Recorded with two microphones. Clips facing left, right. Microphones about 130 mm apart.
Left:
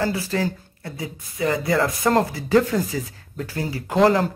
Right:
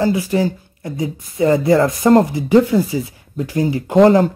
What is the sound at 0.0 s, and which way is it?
Speech, 15° right (ahead or behind).